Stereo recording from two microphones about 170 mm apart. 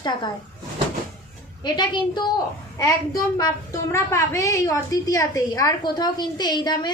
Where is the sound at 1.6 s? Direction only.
25° left (ahead or behind).